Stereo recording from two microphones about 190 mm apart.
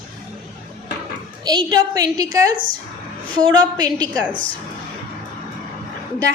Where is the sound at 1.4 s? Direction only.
20° right (ahead or behind).